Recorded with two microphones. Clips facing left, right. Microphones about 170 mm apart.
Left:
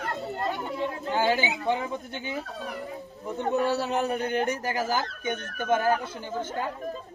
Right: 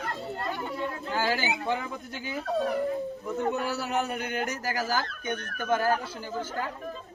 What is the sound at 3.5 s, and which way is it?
Speech, 30° left (ahead or behind).